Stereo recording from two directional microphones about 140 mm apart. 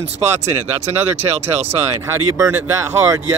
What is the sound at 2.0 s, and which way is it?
Speech, 25° right (ahead or behind).